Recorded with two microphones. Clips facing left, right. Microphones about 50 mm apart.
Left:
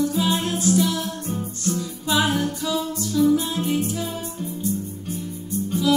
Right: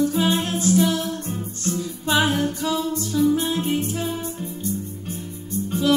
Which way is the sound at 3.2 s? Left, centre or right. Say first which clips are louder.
Left 1 dB; right.